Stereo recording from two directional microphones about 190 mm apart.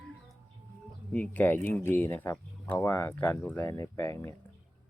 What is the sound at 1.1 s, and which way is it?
Speech, 10° left (ahead or behind).